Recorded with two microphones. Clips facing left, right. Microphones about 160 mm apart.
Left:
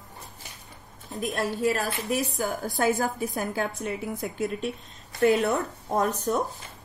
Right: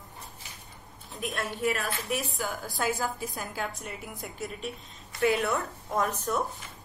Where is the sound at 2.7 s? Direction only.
60° left (ahead or behind).